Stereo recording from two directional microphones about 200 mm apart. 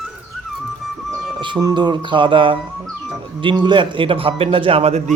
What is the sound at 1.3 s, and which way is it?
A man's voice, 20° right (ahead or behind).